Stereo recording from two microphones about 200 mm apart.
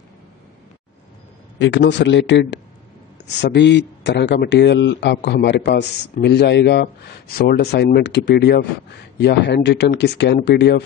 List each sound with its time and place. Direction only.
1.6 s speech: 65° left (ahead or behind)